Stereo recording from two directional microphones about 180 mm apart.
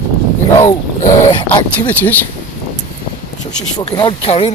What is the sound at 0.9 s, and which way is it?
Speech, 45° left (ahead or behind).